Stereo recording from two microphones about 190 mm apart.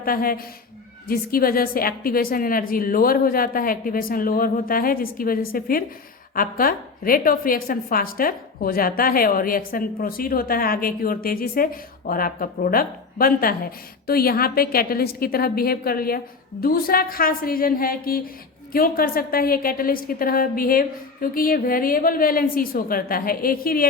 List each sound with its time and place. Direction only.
0.0 s a woman's voice: 50° left (ahead or behind)